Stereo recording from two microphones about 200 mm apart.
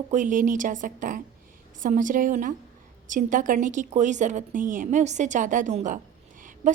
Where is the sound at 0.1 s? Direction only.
40° right (ahead or behind).